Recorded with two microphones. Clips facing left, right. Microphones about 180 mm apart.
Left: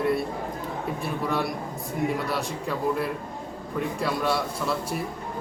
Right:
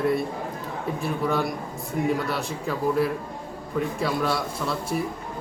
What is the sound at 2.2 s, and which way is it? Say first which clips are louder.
A man's voice: right 1 dB; centre (ahead or behind).